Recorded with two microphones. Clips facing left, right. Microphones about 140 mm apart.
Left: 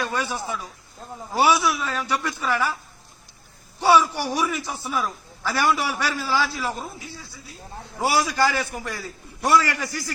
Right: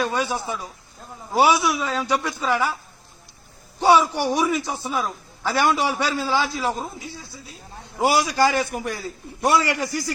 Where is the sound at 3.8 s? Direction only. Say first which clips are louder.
Right 1 dB; 15° right (ahead or behind).